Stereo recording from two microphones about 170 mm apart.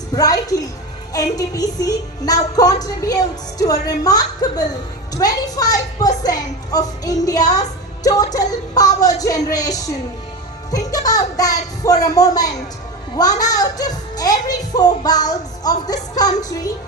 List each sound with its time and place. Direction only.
0.1 s speech: 20° left (ahead or behind)